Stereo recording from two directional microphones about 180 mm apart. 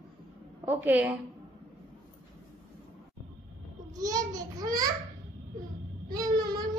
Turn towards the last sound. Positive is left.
turn(degrees=-20)  # may be behind; listen again after turning